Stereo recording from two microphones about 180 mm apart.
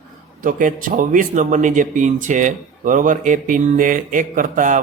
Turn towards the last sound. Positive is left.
turn(degrees=-45)  # may be behind; listen again after turning